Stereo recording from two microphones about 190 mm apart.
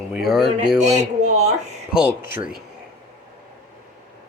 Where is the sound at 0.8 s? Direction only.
35° right (ahead or behind).